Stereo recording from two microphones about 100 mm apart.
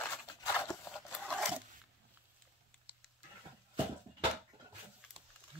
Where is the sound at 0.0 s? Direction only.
25° left (ahead or behind).